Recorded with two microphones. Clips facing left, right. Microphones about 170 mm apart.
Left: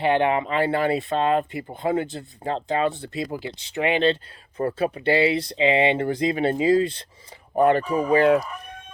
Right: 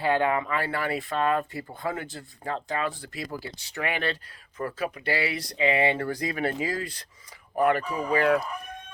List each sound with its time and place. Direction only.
0.0 s speech: 20° left (ahead or behind)